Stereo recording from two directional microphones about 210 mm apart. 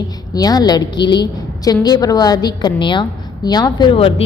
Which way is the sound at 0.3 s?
20° left (ahead or behind).